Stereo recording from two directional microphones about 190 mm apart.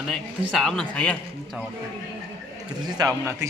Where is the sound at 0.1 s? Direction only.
Centre (ahead or behind).